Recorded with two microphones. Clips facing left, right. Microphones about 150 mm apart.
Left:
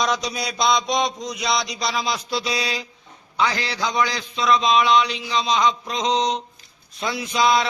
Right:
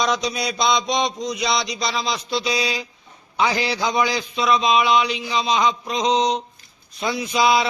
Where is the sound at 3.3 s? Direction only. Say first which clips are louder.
Right 2 dB; 15° right (ahead or behind).